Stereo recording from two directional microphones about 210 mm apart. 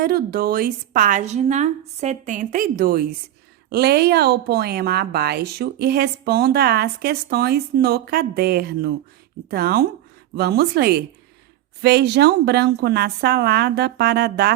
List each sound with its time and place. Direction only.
0.0 s a woman's voice: 45° right (ahead or behind)